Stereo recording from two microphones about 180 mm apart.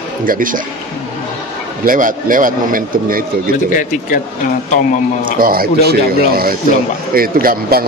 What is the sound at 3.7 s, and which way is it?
Speech, 45° left (ahead or behind).